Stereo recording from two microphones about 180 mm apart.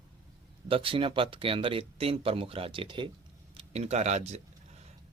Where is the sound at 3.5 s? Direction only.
35° right (ahead or behind).